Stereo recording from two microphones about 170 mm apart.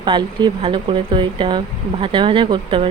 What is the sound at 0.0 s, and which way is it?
Speech, 25° right (ahead or behind).